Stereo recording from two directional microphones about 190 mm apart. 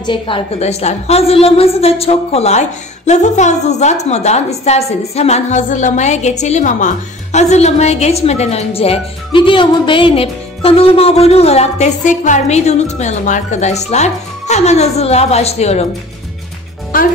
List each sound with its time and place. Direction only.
0.0 s a woman's voice: 25° left (ahead or behind)
16.9 s speech: 45° left (ahead or behind)